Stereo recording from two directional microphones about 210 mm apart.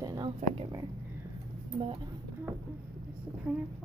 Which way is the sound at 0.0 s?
15° right (ahead or behind).